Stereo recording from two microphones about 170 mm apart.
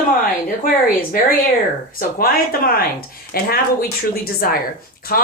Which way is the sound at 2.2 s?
60° left (ahead or behind).